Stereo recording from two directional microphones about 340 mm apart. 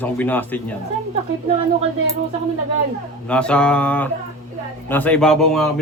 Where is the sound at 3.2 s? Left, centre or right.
Centre.